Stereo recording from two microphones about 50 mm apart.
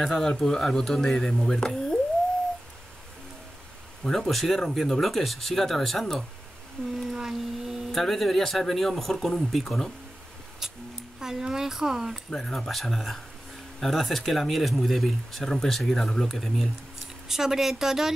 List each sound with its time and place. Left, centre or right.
0.0 s speech: centre
4.0 s speech: centre
7.1 s a sound: centre
7.9 s speech: centre
10.6 s speech: centre
12.3 s speech: centre
12.5 s speech: centre
17.3 s speech: centre